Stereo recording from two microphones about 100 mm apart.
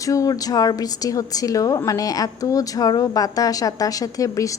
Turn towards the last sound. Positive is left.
turn(degrees=35)  # may be behind; listen again after turning